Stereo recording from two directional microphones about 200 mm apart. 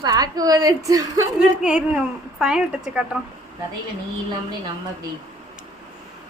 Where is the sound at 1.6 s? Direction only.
5° right (ahead or behind).